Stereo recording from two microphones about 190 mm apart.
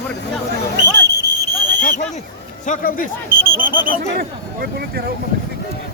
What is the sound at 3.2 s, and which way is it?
Speech, 50° right (ahead or behind).